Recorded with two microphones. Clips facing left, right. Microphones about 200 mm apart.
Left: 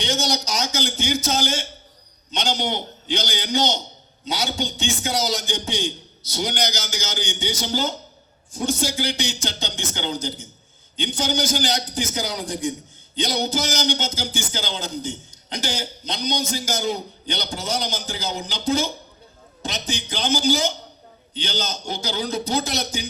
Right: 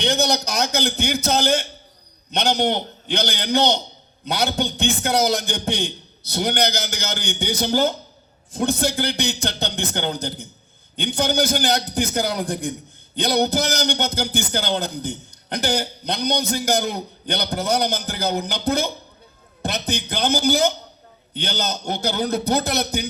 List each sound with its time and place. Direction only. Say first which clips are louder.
0.0 s a man's voice: right 4 dB; 60° right (ahead or behind)